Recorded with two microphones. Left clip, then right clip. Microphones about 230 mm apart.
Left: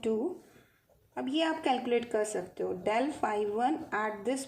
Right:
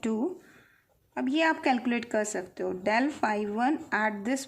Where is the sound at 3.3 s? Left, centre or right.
Right.